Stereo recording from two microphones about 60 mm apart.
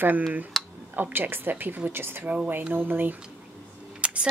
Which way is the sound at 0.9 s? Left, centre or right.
Right.